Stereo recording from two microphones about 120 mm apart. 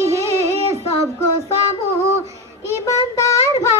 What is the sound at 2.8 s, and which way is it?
Child singing, 25° left (ahead or behind).